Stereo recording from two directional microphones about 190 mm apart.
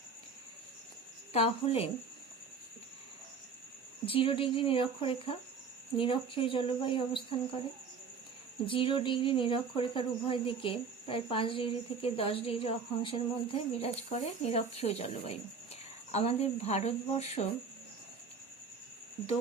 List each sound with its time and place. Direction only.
1.3 s speech: 30° left (ahead or behind)
4.0 s speech: 30° left (ahead or behind)
8.6 s speech: 25° left (ahead or behind)